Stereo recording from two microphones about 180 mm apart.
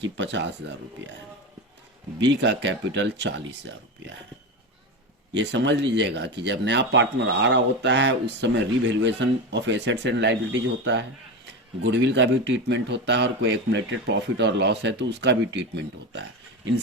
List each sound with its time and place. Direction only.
0.0 s speech: 85° right
2.1 s speech: 80° right
5.3 s speech: 80° right